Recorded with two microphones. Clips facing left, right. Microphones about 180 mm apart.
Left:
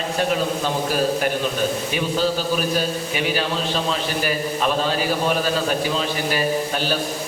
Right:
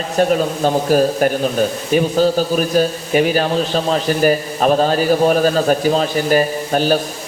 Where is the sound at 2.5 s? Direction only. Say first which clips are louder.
Right 6 dB; 45° right (ahead or behind).